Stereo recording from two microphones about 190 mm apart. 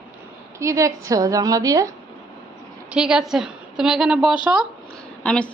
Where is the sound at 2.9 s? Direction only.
5° right (ahead or behind).